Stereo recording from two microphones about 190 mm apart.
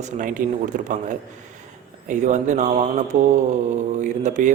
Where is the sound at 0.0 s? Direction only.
45° right (ahead or behind).